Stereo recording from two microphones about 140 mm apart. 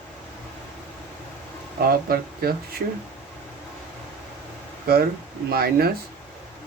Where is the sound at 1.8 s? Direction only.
90° right.